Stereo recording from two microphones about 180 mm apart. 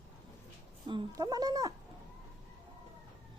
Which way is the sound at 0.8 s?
25° right (ahead or behind).